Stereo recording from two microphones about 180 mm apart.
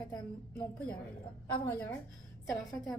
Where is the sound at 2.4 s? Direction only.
5° left (ahead or behind).